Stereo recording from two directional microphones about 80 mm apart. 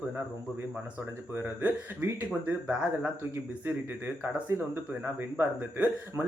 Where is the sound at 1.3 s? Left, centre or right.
Right.